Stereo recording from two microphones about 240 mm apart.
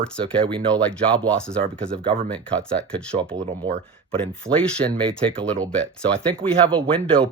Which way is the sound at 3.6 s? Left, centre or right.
Centre.